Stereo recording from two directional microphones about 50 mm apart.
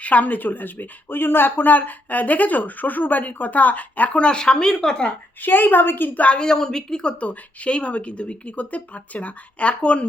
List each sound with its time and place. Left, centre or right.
0.0 s a woman's voice: left; by 5.0 s centre
5.4 s a woman's voice: left
6.1 s speech: left
6.4 s speech: centre
7.2 s speech: left